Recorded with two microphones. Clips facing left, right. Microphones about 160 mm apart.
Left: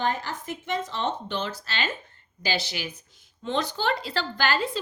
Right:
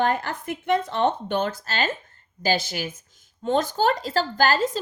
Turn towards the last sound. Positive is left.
turn(degrees=-40)  # may be behind; listen again after turning